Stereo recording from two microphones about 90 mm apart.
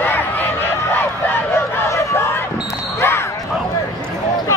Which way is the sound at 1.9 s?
35° left (ahead or behind).